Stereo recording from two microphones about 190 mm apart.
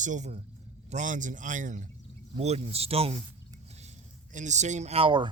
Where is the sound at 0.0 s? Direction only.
40° right (ahead or behind).